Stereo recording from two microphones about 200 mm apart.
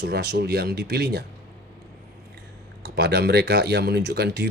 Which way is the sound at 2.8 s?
55° right (ahead or behind).